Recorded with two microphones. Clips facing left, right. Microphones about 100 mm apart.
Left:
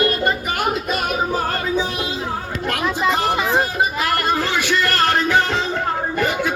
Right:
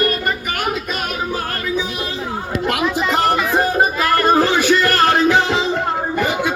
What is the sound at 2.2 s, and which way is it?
Chatter, 5° right (ahead or behind).